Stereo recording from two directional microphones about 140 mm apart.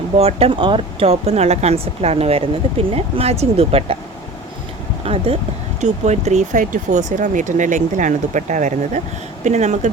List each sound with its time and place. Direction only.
0.2 s speech: 45° right (ahead or behind)
5.0 s speech: 45° right (ahead or behind)